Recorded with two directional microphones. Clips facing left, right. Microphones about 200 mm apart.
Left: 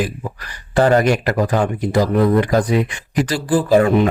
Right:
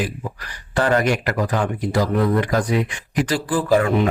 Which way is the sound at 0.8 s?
30° left (ahead or behind).